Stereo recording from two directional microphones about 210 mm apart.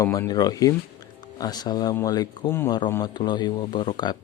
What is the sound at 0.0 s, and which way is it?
Speech, 15° left (ahead or behind).